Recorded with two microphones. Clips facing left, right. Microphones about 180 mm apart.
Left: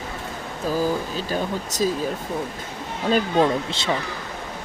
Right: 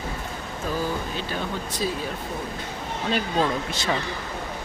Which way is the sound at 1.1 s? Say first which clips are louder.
Left 4 dB; 40° left (ahead or behind).